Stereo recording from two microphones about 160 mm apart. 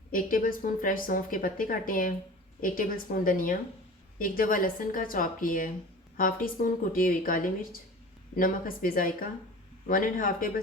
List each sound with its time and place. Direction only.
0.1 s a woman's voice: 60° left (ahead or behind)